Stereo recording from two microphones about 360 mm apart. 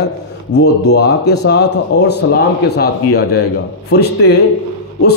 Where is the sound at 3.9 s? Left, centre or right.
Left.